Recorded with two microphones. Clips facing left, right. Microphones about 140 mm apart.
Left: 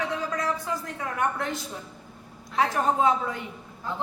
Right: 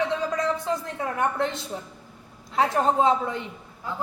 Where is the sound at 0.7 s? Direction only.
25° right (ahead or behind).